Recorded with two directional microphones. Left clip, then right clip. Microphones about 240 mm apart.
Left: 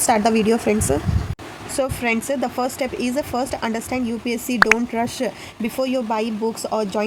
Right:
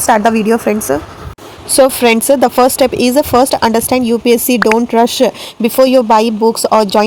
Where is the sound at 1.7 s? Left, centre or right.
Right.